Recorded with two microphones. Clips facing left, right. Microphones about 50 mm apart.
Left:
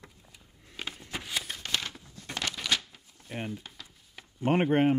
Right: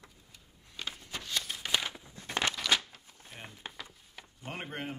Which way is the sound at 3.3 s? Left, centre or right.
Left.